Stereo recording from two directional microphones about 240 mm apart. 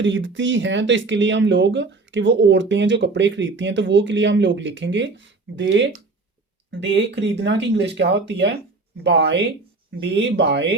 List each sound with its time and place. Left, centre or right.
0.0 s speech: right